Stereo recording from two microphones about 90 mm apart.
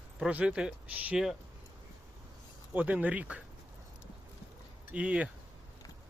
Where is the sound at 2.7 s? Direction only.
15° right (ahead or behind).